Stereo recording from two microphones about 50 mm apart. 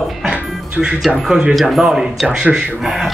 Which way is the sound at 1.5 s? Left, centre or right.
Centre.